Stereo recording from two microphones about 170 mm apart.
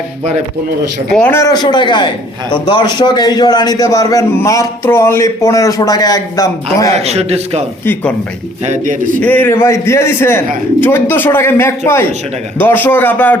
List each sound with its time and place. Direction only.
1.1 s a man's voice: 10° left (ahead or behind)
6.9 s a man's voice: 40° right (ahead or behind)
8.6 s a man's voice: 45° right (ahead or behind)
9.2 s a man's voice: 10° left (ahead or behind)